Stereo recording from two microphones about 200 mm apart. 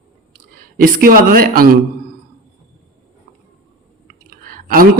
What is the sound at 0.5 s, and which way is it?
Speech, 45° right (ahead or behind).